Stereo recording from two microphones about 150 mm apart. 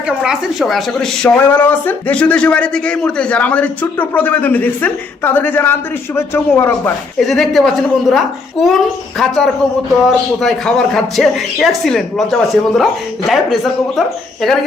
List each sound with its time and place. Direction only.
0.2 s speech: centre (ahead or behind)
1.5 s a man's voice: 15° left (ahead or behind)
7.2 s speech: centre (ahead or behind)